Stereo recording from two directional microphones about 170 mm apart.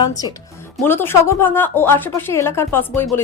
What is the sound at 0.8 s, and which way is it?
A woman's voice, 15° left (ahead or behind).